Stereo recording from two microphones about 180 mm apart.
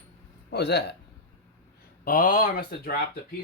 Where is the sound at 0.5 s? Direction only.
65° left (ahead or behind).